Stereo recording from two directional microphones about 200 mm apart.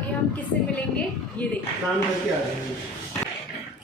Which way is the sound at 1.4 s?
5° left (ahead or behind).